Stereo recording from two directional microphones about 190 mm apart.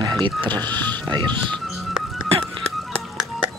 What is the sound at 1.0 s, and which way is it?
Speech, 25° right (ahead or behind).